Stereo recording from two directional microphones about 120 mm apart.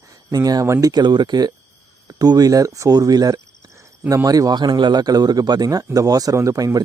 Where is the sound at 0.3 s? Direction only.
30° right (ahead or behind).